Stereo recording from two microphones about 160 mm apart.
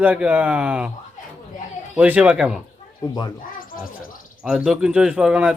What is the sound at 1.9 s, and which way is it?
Speech, 10° right (ahead or behind).